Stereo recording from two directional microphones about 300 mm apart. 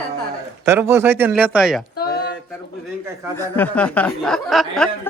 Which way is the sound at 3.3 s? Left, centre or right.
Centre.